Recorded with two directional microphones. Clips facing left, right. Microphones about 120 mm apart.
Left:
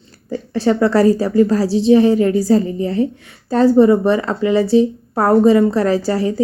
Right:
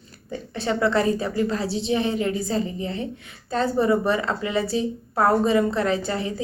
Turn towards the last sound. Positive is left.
turn(degrees=30)  # may be behind; listen again after turning